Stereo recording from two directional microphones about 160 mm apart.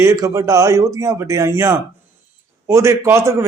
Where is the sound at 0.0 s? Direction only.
20° right (ahead or behind).